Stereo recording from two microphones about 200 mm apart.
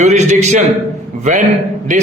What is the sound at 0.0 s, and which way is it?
Speech, 35° right (ahead or behind).